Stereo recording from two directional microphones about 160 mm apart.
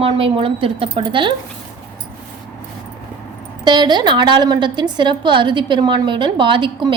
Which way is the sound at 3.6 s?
25° right (ahead or behind).